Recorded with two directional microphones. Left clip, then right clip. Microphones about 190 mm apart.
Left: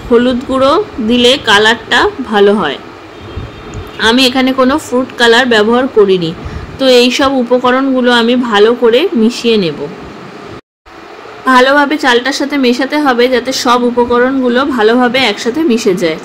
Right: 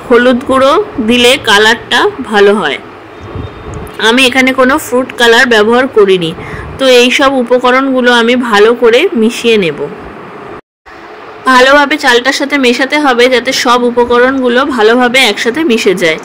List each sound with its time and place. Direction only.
0.1 s speech: 10° right (ahead or behind)
4.0 s speech: 15° right (ahead or behind)
11.4 s a woman's voice: 20° right (ahead or behind)